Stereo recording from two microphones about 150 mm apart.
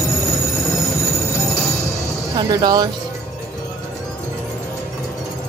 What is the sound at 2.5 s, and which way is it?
Speech, 25° right (ahead or behind).